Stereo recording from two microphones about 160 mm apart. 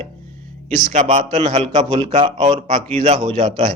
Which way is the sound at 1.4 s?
35° right (ahead or behind).